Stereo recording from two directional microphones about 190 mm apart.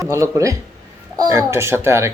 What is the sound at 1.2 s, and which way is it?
Speech, 15° right (ahead or behind).